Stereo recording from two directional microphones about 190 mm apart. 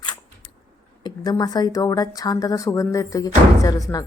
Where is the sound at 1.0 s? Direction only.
20° left (ahead or behind).